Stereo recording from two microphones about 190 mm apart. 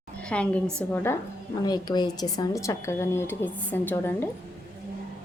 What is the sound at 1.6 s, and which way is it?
A woman's voice, 20° left (ahead or behind).